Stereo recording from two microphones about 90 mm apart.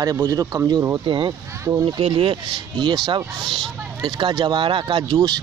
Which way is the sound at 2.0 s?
90° right.